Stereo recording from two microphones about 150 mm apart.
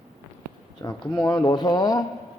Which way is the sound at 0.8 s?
25° left (ahead or behind).